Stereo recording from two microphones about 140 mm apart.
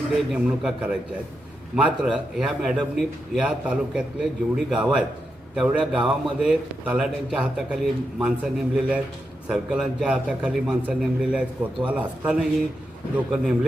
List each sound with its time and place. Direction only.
0.3 s a man's voice: 5° right (ahead or behind)